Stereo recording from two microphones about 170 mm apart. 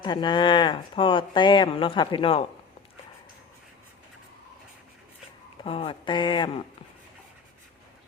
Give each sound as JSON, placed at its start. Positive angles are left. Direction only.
{"t": 0.0, "sound": "speech", "side_deg": 25}
{"t": 5.6, "sound": "speech", "side_deg": 30}